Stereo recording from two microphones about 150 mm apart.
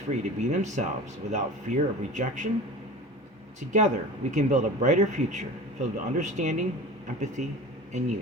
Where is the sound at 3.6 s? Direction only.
60° right (ahead or behind).